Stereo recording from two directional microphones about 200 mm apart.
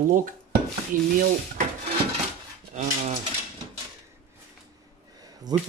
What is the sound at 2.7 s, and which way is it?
Cutlery, 35° right (ahead or behind).